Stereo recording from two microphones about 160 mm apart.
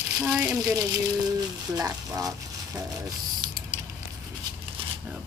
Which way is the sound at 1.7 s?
20° right (ahead or behind).